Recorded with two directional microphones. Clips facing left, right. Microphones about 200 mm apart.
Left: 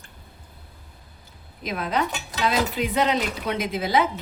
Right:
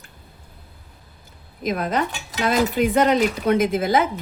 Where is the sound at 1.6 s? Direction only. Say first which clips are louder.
Right 3 dB; 45° right (ahead or behind).